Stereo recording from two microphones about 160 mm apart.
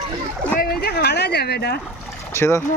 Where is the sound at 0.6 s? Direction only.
75° left (ahead or behind); by 1.7 s 90° left.